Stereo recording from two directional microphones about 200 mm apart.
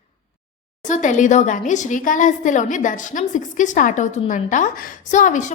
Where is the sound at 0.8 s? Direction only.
40° left (ahead or behind).